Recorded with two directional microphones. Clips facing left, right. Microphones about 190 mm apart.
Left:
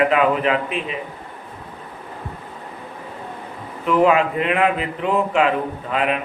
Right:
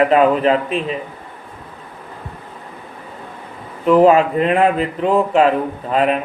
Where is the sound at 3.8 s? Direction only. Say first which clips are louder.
Right 5 dB; 35° right (ahead or behind).